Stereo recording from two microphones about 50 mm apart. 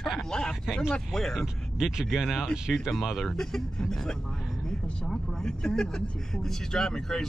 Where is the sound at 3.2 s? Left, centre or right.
Centre.